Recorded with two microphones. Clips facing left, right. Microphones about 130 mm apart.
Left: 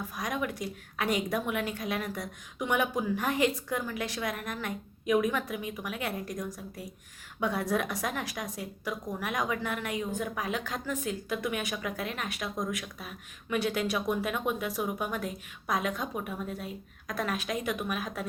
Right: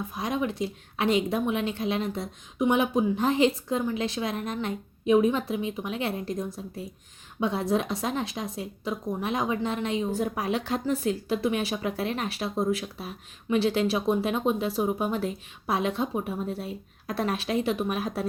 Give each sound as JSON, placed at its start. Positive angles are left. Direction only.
{"t": 0.0, "sound": "a woman's voice", "side_deg": -25}